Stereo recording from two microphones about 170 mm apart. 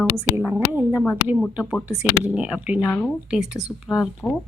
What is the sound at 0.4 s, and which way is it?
Speech, 10° right (ahead or behind).